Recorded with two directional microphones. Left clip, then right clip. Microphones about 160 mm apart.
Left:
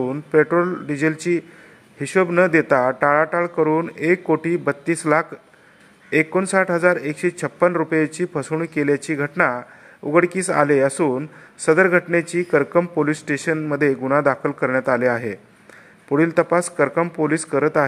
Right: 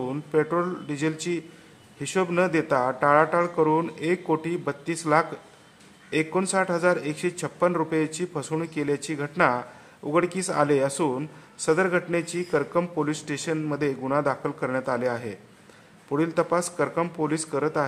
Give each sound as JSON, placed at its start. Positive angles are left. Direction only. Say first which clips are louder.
{"t": 0.3, "sound": "a man's voice", "louder": "left 8 dB", "side_deg": 20}